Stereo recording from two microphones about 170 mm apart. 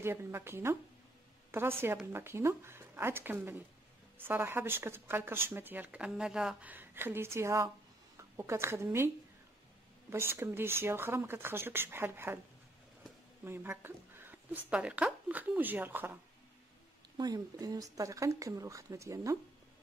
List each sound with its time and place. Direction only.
0.0 s speech: 15° right (ahead or behind)
13.4 s a sound: 10° right (ahead or behind)
14.7 s speech: 5° right (ahead or behind)
17.2 s speech: 20° right (ahead or behind)